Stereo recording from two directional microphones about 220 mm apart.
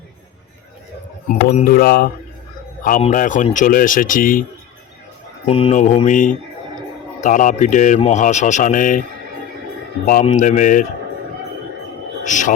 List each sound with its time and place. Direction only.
1.3 s mantra: 40° left (ahead or behind)
2.8 s a man's voice: 35° left (ahead or behind)
5.5 s a man's voice: 25° left (ahead or behind)
10.1 s a man's voice: 35° left (ahead or behind)
12.2 s a man's voice: 35° left (ahead or behind)